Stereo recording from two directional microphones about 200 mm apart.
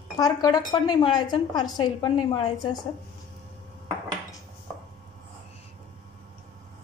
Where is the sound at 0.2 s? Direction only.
20° left (ahead or behind).